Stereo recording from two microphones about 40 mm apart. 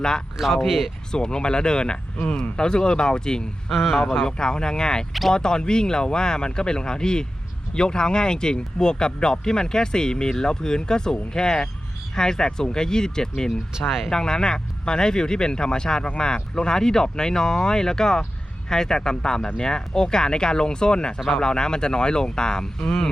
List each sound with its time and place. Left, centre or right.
0.3 s speech: centre
1.1 s speech: left
3.7 s speech: centre
4.3 s speech: centre
21.2 s speech: centre
21.4 s speech: centre